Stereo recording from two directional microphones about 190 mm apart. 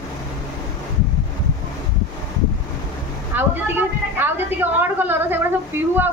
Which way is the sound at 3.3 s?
10° right (ahead or behind).